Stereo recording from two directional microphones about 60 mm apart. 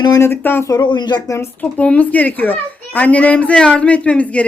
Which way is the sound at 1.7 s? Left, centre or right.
Left.